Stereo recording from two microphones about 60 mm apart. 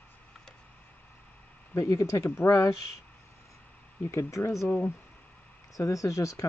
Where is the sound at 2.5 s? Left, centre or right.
Left.